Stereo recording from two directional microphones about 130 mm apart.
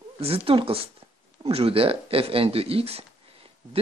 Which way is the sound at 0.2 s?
45° right (ahead or behind).